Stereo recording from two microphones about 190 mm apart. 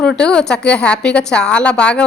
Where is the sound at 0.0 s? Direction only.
5° left (ahead or behind).